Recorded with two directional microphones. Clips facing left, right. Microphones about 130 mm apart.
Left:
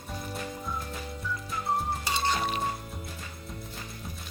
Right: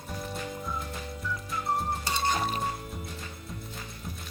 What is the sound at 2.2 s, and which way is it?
Music, 45° right (ahead or behind).